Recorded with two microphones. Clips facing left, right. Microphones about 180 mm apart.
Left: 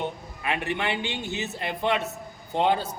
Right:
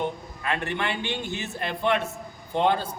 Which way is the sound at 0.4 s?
15° left (ahead or behind).